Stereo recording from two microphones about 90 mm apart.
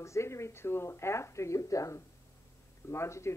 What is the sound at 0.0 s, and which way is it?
Speech, 35° left (ahead or behind).